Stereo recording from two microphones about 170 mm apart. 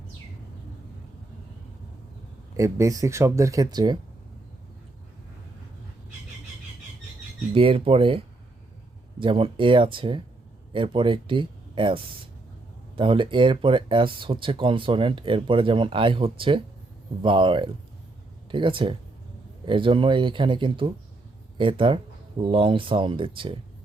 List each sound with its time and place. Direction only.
2.6 s speech: 15° right (ahead or behind)
7.5 s speech: 35° right (ahead or behind)